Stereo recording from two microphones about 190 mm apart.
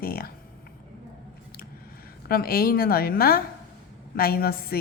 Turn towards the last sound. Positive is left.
turn(degrees=55)  # may be behind; listen again after turning